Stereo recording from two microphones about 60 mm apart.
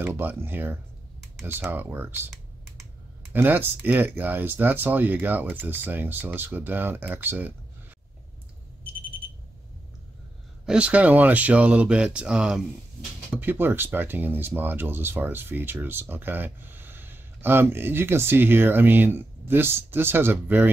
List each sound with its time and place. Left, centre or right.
0.1 s speech: right
3.3 s speech: right
10.6 s speech: centre
13.4 s speech: right